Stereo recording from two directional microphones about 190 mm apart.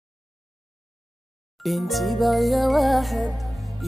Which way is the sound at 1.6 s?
Centre (ahead or behind).